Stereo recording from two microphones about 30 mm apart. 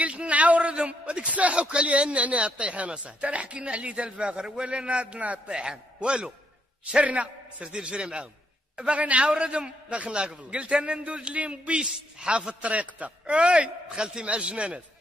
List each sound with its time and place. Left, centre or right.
0.0 s a sound: right
1.5 s a man's voice: right
5.0 s a man's voice: right
5.6 s a man's voice: right
7.0 s speech: right
7.6 s a man's voice: right
8.8 s speech: right
9.3 s a man's voice: right